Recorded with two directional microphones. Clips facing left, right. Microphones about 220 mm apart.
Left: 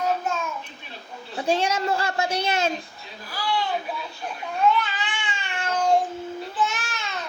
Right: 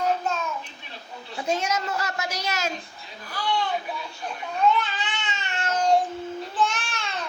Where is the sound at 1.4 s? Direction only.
30° left (ahead or behind).